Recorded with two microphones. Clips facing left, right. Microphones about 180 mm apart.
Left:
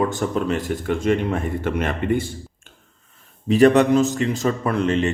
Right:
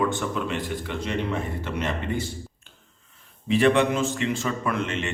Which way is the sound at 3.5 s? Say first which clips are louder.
Left 6 dB; 40° left (ahead or behind).